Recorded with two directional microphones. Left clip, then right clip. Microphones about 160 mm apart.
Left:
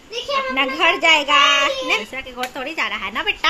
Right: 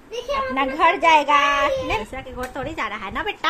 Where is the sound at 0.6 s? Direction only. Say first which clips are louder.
Even; 5° right (ahead or behind).